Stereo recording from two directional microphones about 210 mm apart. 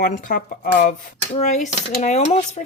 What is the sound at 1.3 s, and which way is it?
Speech, 35° left (ahead or behind).